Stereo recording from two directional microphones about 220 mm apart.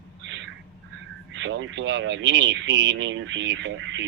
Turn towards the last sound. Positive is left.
turn(degrees=-55)  # may be behind; listen again after turning